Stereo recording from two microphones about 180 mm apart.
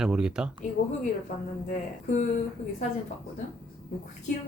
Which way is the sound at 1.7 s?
40° left (ahead or behind).